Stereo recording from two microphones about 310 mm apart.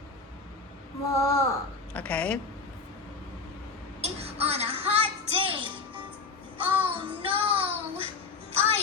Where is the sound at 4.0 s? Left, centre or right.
Centre.